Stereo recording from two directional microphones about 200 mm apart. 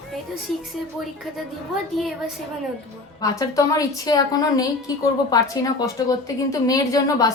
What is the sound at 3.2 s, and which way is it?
A woman's voice, 15° left (ahead or behind).